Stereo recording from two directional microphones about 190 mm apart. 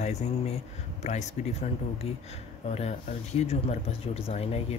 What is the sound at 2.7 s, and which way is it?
Speech, 35° left (ahead or behind).